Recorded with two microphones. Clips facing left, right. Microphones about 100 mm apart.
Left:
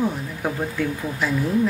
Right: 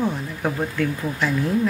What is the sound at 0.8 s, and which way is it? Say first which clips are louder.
Speech: right 1 dB; 10° left (ahead or behind).